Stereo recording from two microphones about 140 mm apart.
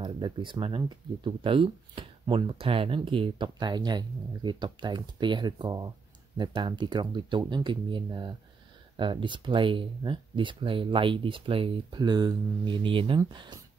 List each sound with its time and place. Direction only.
0.0 s speech: 35° right (ahead or behind)